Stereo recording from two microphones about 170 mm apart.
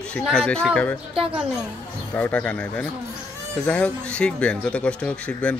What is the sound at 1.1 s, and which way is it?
Speech, 35° right (ahead or behind).